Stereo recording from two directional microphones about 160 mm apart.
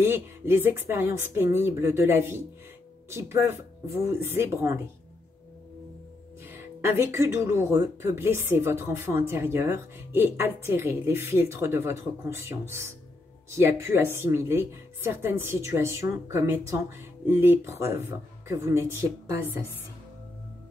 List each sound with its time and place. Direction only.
0.0 s speech: 15° right (ahead or behind)
6.4 s speech: 15° right (ahead or behind)